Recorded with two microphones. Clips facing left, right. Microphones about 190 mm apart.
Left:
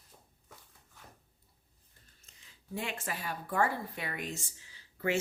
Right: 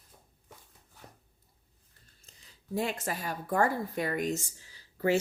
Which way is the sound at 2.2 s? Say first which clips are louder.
Right 5 dB; 35° right (ahead or behind).